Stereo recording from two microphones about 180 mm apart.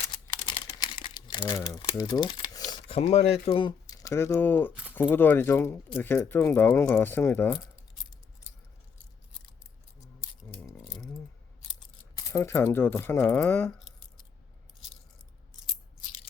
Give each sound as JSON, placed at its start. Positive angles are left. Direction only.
{"t": 0.3, "sound": "crumpling", "side_deg": 30}
{"t": 2.0, "sound": "speech", "side_deg": 20}
{"t": 11.6, "sound": "a sound", "side_deg": 25}